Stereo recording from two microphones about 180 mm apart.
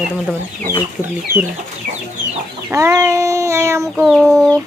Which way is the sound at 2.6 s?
15° right (ahead or behind).